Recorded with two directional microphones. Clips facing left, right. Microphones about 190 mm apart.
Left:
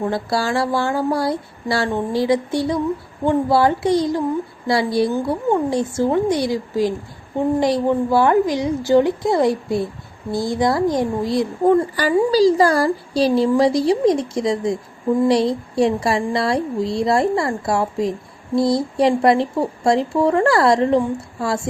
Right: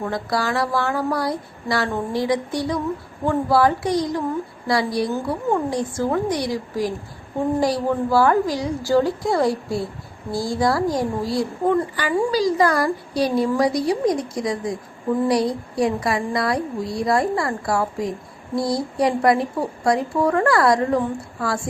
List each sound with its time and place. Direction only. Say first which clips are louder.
0.0 s a woman's voice: left 3 dB; 30° left (ahead or behind)
11.9 s a woman's voice: left 5 dB; 35° left (ahead or behind)